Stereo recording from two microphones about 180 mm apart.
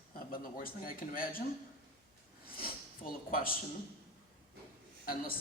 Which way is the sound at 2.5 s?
55° left (ahead or behind).